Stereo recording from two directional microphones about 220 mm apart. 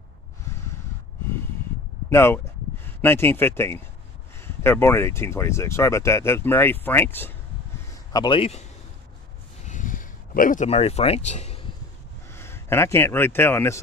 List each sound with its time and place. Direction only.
2.0 s speech: 10° left (ahead or behind)
8.1 s a man's voice: 20° left (ahead or behind)
9.7 s a sound: 35° left (ahead or behind)
12.3 s speech: 10° left (ahead or behind)